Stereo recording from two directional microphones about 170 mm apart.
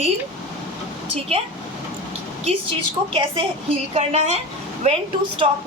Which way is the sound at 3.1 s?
30° right (ahead or behind).